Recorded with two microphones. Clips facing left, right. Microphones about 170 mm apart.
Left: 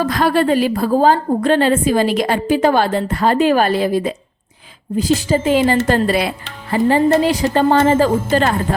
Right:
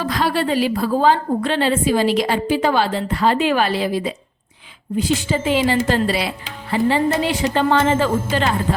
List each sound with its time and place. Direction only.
0.0 s a woman's voice: 50° left (ahead or behind)